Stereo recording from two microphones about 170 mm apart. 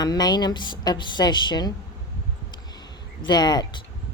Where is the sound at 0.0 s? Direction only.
25° left (ahead or behind).